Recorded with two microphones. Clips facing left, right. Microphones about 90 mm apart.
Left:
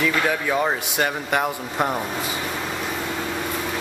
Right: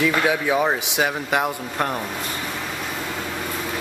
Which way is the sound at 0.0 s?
5° right (ahead or behind).